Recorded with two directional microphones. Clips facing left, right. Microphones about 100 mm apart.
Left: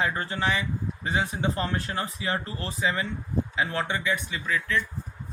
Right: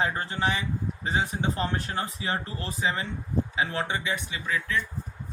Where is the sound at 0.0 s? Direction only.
25° right (ahead or behind).